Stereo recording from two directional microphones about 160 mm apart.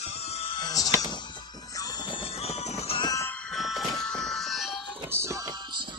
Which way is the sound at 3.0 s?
20° left (ahead or behind).